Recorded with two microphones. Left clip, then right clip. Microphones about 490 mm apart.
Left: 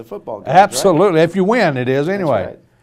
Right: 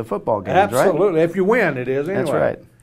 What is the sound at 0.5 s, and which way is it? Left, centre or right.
Speech, left.